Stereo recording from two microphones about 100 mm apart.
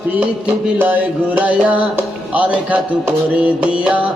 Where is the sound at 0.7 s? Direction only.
15° right (ahead or behind).